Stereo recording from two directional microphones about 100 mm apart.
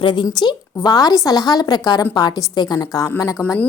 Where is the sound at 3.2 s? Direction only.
35° left (ahead or behind).